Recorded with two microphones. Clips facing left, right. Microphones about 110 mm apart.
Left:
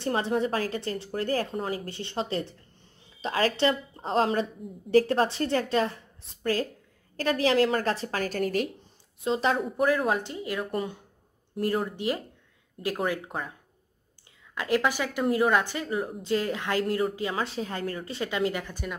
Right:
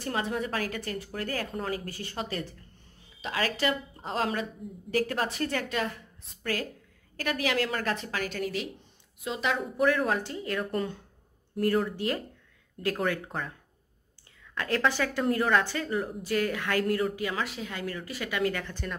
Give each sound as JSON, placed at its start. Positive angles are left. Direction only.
{"t": 0.0, "sound": "a woman's voice", "side_deg": 30}
{"t": 9.2, "sound": "a woman's voice", "side_deg": 35}
{"t": 10.0, "sound": "a woman's voice", "side_deg": 20}
{"t": 14.5, "sound": "a woman's voice", "side_deg": 15}